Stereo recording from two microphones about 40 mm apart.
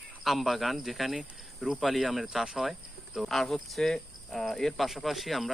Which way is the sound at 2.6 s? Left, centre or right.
Centre.